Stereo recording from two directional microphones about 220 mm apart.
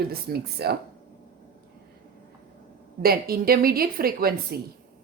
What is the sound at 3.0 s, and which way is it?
A woman's voice, 45° right (ahead or behind).